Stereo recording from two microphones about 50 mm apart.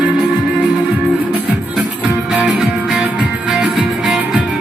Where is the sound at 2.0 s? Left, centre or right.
Right.